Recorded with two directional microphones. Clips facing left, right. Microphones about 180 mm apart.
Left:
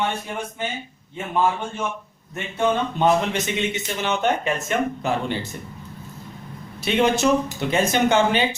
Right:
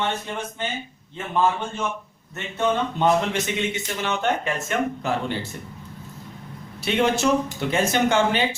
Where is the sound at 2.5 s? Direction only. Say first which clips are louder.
Left 1 dB; 15° left (ahead or behind).